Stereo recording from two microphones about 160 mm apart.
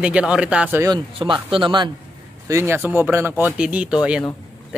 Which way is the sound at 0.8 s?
30° right (ahead or behind).